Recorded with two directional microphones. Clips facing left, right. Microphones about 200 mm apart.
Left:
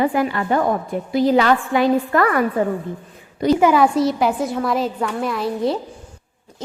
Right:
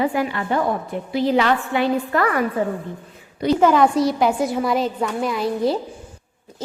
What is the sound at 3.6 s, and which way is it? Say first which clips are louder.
A woman's voice: right 1 dB; 5° left (ahead or behind).